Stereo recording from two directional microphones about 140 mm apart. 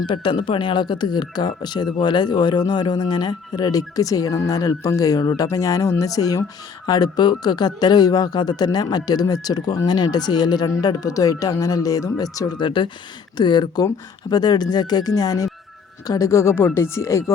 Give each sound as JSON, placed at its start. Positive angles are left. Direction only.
{"t": 0.1, "sound": "speech", "side_deg": 35}